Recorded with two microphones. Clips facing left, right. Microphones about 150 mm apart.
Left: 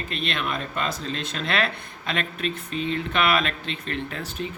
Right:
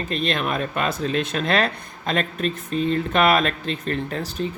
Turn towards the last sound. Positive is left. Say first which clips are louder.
# right 5 dB
turn(degrees=-35)  # may be behind; listen again after turning